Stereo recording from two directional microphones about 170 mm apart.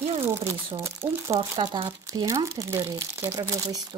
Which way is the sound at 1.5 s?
30° right (ahead or behind).